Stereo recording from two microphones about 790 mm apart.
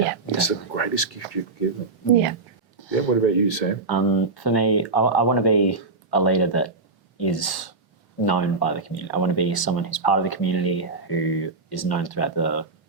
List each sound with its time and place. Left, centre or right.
0.3 s a sound: left
2.9 s speech: left
3.8 s speech: left